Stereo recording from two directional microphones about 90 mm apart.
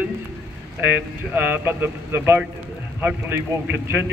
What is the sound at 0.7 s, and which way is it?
A man's voice, 20° right (ahead or behind).